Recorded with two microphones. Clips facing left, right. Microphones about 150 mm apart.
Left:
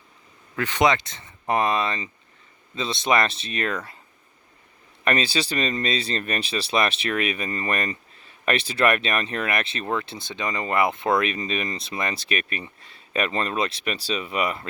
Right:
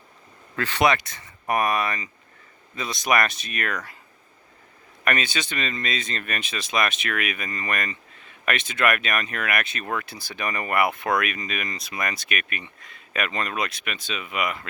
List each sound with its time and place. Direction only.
0.5 s speech: 15° left (ahead or behind)
5.0 s speech: 30° left (ahead or behind)